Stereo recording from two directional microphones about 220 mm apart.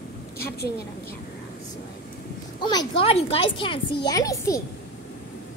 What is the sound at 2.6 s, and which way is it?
A woman's voice, 25° left (ahead or behind).